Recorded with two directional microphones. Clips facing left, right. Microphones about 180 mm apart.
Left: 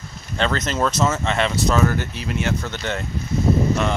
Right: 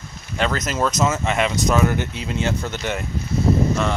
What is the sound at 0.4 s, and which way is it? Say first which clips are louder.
Speech: even; 5° right (ahead or behind).